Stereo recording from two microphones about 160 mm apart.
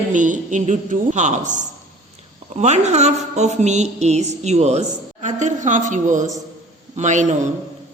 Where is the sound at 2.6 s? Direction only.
45° right (ahead or behind).